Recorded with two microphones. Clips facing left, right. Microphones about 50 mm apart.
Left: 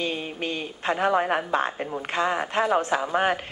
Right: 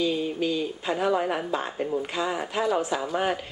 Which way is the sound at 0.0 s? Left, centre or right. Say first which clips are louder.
Right 3 dB; left.